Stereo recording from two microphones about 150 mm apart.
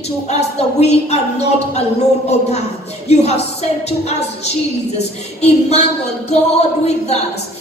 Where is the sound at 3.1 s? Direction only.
45° left (ahead or behind).